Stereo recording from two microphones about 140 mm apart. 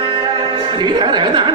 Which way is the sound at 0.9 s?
30° right (ahead or behind).